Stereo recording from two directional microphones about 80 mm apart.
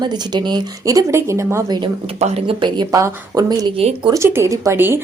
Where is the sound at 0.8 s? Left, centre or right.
Right.